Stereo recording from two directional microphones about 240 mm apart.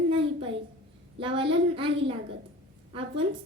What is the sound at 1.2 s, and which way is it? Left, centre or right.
Speech, right.